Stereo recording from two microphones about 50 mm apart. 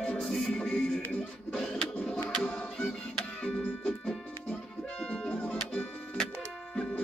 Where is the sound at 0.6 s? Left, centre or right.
Left.